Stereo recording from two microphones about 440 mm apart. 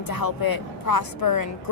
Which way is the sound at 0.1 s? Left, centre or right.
Left.